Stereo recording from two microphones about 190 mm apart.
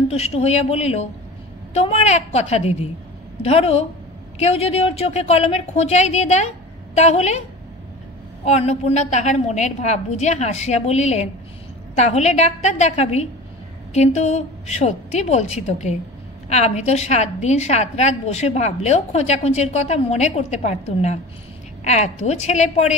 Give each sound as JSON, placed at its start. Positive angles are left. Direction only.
{"t": 0.1, "sound": "a woman's voice", "side_deg": 35}
{"t": 8.5, "sound": "a woman's voice", "side_deg": 35}